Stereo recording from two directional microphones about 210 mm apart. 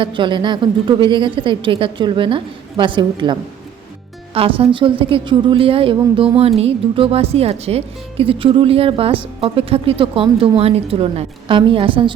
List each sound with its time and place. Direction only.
0.0 s speech: 25° right (ahead or behind)
4.4 s speech: 25° right (ahead or behind)